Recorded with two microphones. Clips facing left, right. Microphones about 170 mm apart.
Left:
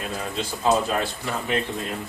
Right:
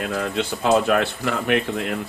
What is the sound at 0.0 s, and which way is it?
Speech, 70° right (ahead or behind).